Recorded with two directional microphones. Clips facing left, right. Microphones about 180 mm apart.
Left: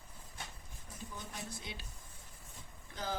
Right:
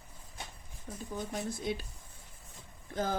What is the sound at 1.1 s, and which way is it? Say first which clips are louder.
Speech: right 11 dB; 45° right (ahead or behind).